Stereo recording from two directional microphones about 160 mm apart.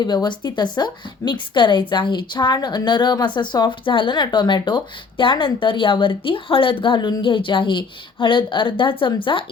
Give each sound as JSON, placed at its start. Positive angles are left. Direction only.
{"t": 0.0, "sound": "speech", "side_deg": 25}